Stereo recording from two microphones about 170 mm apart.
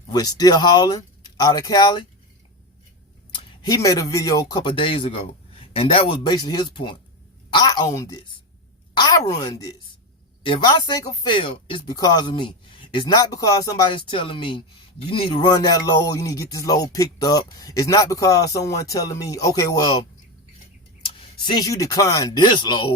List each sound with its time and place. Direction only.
0.1 s speech: 20° left (ahead or behind)
3.3 s a woman's voice: 20° left (ahead or behind)
21.2 s speech: 25° left (ahead or behind)